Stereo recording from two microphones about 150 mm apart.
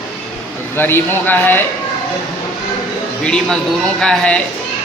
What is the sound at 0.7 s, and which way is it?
Speech, 15° left (ahead or behind).